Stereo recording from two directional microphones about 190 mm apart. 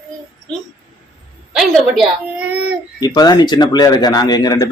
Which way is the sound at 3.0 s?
20° left (ahead or behind).